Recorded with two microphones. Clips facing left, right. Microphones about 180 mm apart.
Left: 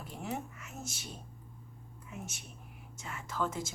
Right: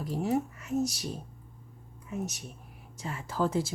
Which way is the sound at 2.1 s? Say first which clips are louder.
Right 10 dB; 40° right (ahead or behind).